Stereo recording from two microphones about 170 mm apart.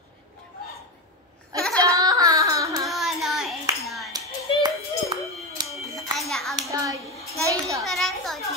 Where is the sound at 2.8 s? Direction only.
Centre (ahead or behind).